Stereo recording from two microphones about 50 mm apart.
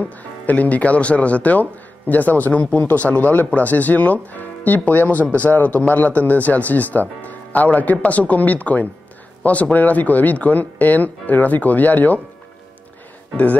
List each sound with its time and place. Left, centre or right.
0.0 s speech: left